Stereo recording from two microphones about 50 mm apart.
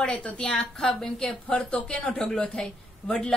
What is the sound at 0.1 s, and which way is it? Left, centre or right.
Speech, left.